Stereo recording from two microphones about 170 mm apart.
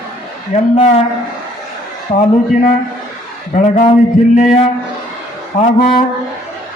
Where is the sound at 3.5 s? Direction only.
45° left (ahead or behind).